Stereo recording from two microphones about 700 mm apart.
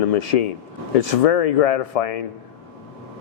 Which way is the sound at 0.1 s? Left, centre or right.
Left.